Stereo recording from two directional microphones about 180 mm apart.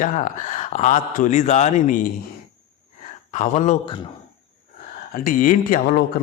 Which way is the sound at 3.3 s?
40° left (ahead or behind).